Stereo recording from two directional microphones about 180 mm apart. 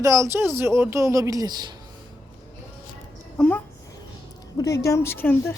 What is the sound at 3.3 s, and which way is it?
Speech, 5° left (ahead or behind).